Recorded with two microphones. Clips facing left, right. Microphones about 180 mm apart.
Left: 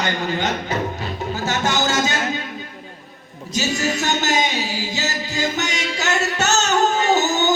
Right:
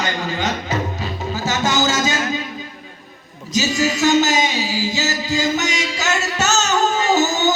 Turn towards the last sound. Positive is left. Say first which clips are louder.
# right 1 dB
turn(degrees=60)  # may be behind; listen again after turning